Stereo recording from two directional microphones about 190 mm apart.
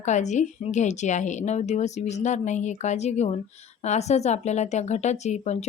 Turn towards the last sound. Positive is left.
turn(degrees=35)  # may be behind; listen again after turning